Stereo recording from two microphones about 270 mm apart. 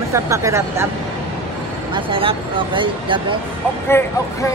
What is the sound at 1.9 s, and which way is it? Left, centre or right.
Speech, centre.